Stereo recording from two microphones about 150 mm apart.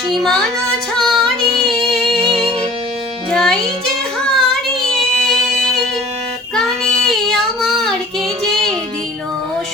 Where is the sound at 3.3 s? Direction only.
5° left (ahead or behind).